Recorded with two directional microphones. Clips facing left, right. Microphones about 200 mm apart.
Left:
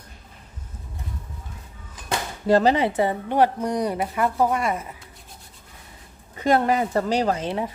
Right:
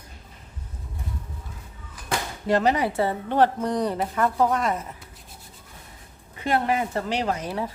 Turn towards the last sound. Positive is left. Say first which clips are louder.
# left 3 dB
turn(degrees=25)  # may be behind; listen again after turning